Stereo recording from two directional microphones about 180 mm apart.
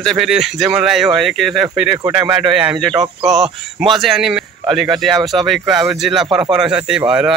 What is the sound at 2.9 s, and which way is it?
Speech, 25° right (ahead or behind).